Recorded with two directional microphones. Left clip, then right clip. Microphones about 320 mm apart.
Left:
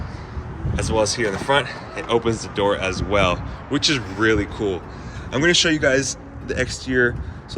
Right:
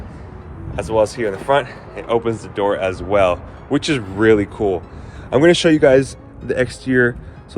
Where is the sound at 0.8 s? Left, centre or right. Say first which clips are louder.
Right 3 dB; centre.